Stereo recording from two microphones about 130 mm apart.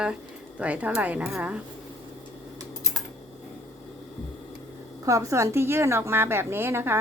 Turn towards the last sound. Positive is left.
turn(degrees=-20)  # may be behind; listen again after turning